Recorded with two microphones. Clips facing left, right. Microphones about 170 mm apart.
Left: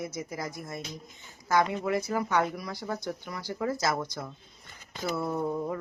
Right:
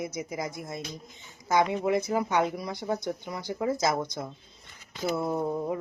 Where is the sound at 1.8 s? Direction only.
20° right (ahead or behind).